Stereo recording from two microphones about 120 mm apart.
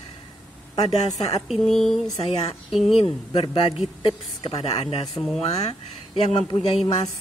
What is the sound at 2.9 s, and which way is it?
A woman's voice, 50° left (ahead or behind).